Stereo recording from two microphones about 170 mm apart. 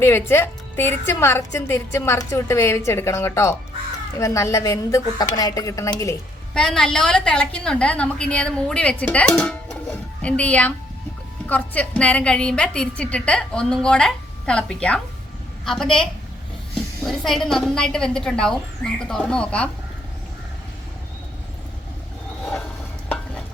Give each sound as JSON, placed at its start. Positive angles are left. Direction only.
{"t": 0.0, "sound": "a woman's voice", "side_deg": 15}
{"t": 6.5, "sound": "a woman's voice", "side_deg": 5}